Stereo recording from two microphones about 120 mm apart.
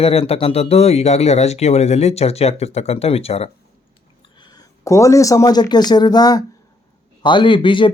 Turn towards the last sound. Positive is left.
turn(degrees=45)  # may be behind; listen again after turning